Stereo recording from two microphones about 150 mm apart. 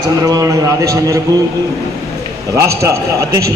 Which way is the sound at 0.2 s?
25° right (ahead or behind).